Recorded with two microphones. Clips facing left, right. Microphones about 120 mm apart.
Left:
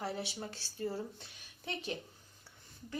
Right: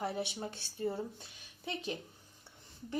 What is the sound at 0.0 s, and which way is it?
A woman's voice, 20° right (ahead or behind).